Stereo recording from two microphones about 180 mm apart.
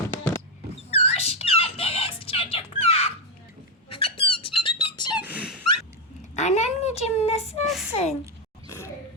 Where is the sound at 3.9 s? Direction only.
30° left (ahead or behind).